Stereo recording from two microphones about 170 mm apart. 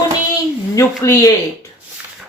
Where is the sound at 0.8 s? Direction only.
20° left (ahead or behind).